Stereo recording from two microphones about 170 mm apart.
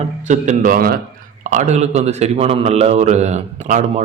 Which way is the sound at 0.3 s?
50° right (ahead or behind).